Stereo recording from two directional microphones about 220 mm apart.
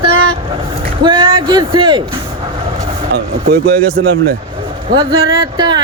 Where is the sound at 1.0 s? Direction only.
20° right (ahead or behind).